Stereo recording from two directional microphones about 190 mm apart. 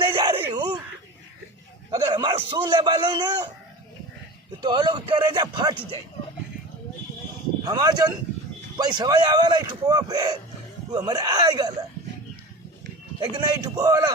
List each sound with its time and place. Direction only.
0.0 s a sound: 25° right (ahead or behind)
1.9 s a man's voice: 20° right (ahead or behind)
4.6 s speech: 25° right (ahead or behind)
7.6 s speech: 20° right (ahead or behind)
13.1 s speech: 20° right (ahead or behind)